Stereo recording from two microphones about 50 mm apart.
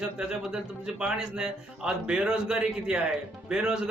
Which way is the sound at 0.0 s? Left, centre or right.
Centre.